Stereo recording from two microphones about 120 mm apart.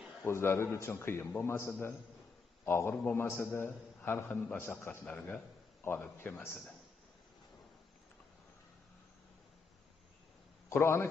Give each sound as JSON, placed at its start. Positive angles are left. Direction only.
{"t": 0.2, "sound": "a man's voice", "side_deg": 20}
{"t": 10.7, "sound": "a man's voice", "side_deg": 20}